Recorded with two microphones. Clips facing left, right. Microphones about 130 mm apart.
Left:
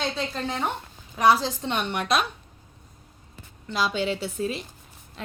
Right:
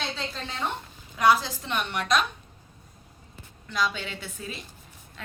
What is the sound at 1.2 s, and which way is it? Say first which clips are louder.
Speech: left 2 dB; 25° left (ahead or behind).